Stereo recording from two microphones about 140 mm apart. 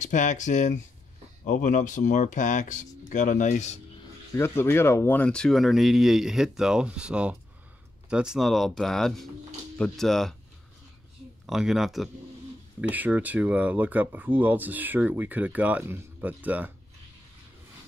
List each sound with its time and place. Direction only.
0.0 s speech: 60° left (ahead or behind)
4.3 s speech: 15° left (ahead or behind)
11.4 s speech: centre (ahead or behind)
12.9 s speech: 10° right (ahead or behind)